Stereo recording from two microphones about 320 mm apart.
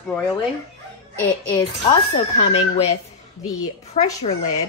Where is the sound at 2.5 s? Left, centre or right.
Centre.